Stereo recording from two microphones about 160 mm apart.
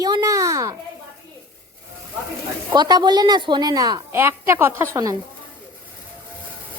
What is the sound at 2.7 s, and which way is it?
A woman's voice, 25° right (ahead or behind).